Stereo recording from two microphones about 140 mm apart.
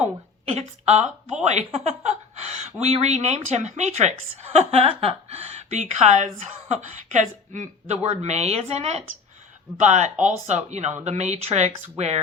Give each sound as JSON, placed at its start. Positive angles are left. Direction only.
{"t": 0.4, "sound": "a woman's voice", "side_deg": -50}